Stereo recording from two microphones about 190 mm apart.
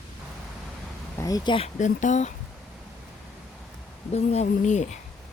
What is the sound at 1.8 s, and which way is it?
Speech, 40° left (ahead or behind).